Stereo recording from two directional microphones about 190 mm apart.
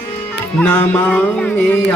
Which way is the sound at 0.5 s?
10° left (ahead or behind).